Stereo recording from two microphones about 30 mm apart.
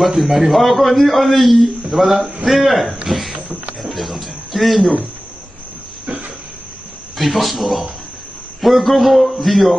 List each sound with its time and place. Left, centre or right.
0.0 s a man's voice: centre
3.3 s speech: right
3.8 s speech: centre
7.2 s a man's voice: centre